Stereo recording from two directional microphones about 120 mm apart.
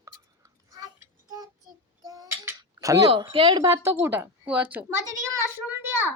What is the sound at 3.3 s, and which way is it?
Speech, 45° right (ahead or behind).